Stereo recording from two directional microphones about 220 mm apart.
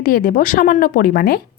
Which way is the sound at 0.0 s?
40° left (ahead or behind).